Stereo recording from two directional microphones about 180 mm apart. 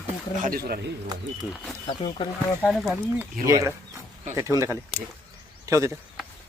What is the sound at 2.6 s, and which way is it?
Speech, centre (ahead or behind).